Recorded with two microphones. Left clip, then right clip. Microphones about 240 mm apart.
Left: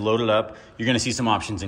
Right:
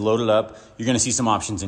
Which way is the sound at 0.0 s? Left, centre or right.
Centre.